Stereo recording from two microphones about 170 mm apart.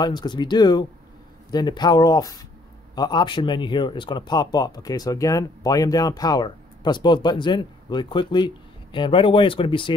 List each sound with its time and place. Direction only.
0.0 s speech: 25° left (ahead or behind)